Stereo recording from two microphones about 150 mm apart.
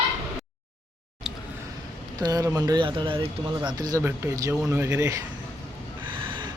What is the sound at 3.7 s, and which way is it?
Speech, 25° right (ahead or behind).